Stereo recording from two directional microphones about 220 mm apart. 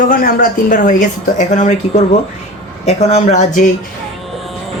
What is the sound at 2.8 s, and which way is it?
Speech, 30° left (ahead or behind).